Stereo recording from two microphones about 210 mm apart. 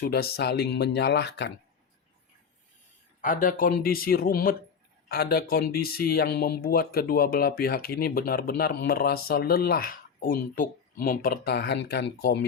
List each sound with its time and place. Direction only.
0.0 s speech: 50° left (ahead or behind)
3.2 s speech: 40° left (ahead or behind)